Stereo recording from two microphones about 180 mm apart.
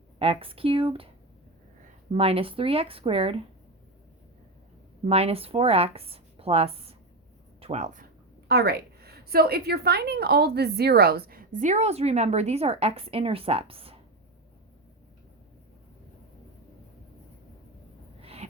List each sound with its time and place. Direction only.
0.2 s speech: 30° right (ahead or behind)
2.1 s speech: 30° right (ahead or behind)
5.0 s speech: 35° right (ahead or behind)
8.4 s a woman's voice: 60° right (ahead or behind); by 13.9 s 30° right (ahead or behind)
18.2 s a sound: 35° right (ahead or behind)